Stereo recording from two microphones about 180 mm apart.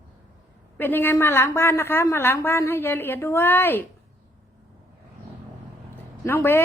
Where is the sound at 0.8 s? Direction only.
10° left (ahead or behind).